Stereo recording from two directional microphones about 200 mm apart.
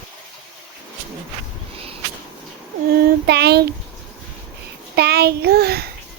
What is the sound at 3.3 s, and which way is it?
Speech, 55° right (ahead or behind).